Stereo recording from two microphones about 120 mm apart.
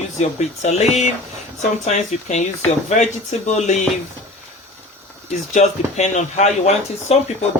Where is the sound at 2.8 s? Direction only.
75° left (ahead or behind).